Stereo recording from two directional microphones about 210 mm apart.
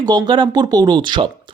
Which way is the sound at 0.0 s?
20° right (ahead or behind).